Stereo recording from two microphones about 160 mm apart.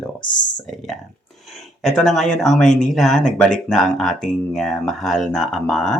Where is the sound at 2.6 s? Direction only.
50° left (ahead or behind).